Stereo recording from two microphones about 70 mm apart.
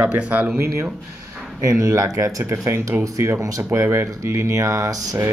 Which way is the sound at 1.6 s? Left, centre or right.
Right.